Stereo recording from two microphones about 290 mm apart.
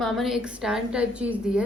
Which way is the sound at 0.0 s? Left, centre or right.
Centre.